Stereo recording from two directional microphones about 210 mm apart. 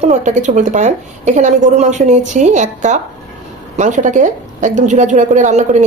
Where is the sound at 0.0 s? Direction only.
35° right (ahead or behind).